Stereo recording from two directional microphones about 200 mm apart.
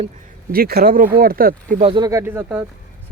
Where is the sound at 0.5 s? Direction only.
50° right (ahead or behind).